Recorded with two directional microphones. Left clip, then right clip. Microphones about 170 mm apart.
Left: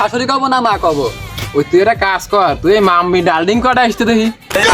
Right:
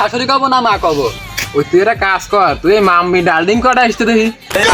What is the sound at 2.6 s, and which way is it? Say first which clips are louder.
Speech: right 1 dB; 25° left (ahead or behind).